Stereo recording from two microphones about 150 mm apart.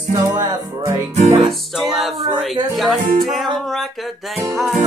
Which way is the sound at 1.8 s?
Centre (ahead or behind).